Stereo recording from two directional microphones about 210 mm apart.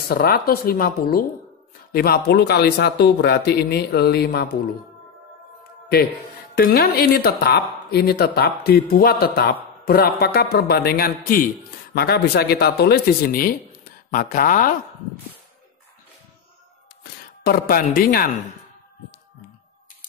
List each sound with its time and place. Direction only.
0.1 s speech: 45° left (ahead or behind)
5.6 s music: 45° left (ahead or behind)
6.5 s speech: 45° left (ahead or behind)
17.4 s speech: 45° left (ahead or behind)